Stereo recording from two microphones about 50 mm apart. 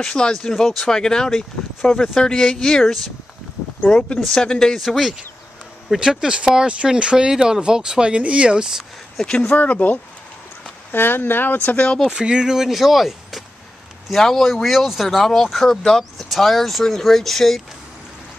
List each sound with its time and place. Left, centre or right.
0.0 s speech: centre
4.7 s speech: centre
5.9 s speech: centre
9.5 s speech: left
10.9 s speech: left
12.1 s speech: centre